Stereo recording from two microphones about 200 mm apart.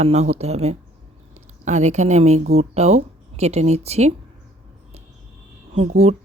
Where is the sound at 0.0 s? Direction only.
30° right (ahead or behind).